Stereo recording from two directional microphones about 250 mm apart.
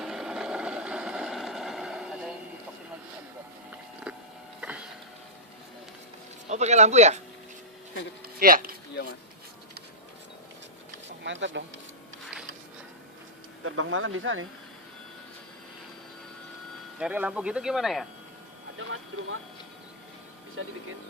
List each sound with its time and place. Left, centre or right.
0.0 s vehicle: centre
4.1 s a sound: centre
4.6 s printer: centre
6.5 s speech: right
8.4 s speech: right
11.2 s speech: right
13.7 s speech: right
17.0 s speech: centre
18.8 s speech: right
20.6 s speech: right